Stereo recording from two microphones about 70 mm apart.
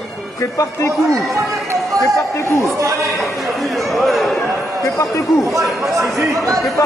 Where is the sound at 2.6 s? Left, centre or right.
Right.